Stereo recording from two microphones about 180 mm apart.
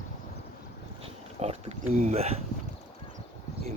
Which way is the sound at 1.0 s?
35° right (ahead or behind).